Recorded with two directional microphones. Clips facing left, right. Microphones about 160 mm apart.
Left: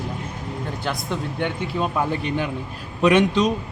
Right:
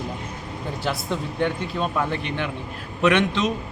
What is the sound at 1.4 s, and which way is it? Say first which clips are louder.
Speech: even; 5° left (ahead or behind).